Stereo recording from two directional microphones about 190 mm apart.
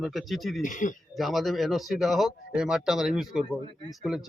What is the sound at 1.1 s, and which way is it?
A man's voice, centre (ahead or behind).